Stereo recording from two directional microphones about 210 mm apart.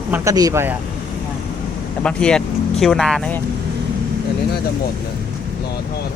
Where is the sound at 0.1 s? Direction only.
15° right (ahead or behind).